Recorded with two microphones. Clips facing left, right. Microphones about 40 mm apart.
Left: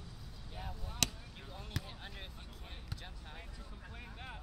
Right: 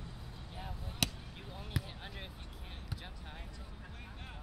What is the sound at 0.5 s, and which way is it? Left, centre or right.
Basketball bounce, centre.